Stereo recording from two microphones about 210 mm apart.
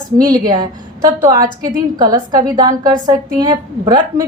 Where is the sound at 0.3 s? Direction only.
20° right (ahead or behind).